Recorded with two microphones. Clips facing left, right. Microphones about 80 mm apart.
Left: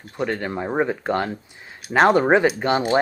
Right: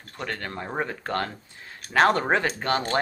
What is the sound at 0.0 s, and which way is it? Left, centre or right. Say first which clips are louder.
Speech: left 8 dB; centre.